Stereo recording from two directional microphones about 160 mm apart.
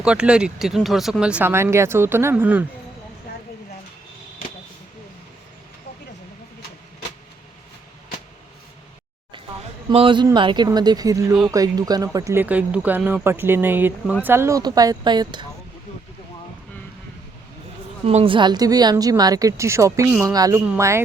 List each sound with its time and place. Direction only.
0.0 s speech: 5° right (ahead or behind)
9.9 s a man's voice: 35° right (ahead or behind)
18.0 s a woman's voice: 40° right (ahead or behind); by 21.0 s 15° right (ahead or behind)